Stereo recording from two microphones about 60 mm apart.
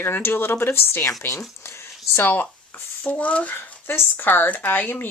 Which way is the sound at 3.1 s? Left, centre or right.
Left.